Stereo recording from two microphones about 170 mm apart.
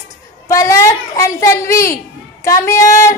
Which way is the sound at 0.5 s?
20° left (ahead or behind).